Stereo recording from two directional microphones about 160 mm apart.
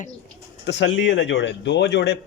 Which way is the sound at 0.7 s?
90° left.